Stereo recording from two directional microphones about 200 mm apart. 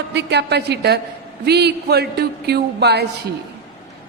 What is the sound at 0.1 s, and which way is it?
Speech, 60° right (ahead or behind).